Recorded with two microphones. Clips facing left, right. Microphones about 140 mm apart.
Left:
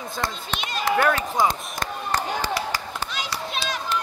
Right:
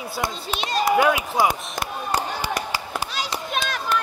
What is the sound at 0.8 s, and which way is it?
Basketball bounce, 10° right (ahead or behind).